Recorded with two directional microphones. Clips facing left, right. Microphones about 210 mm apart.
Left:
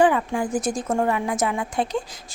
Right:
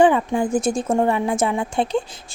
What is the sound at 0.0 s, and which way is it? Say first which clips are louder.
A woman's voice: right 3 dB; 25° right (ahead or behind).